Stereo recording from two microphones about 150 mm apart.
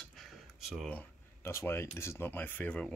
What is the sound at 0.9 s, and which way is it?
Speech, 15° left (ahead or behind).